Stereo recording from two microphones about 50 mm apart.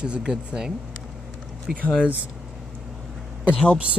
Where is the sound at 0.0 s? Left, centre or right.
Centre.